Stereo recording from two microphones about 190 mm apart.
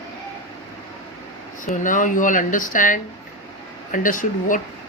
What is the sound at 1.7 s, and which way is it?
Speech, 40° left (ahead or behind).